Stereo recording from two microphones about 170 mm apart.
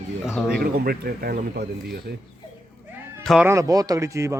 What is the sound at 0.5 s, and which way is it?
Speech, 60° right (ahead or behind).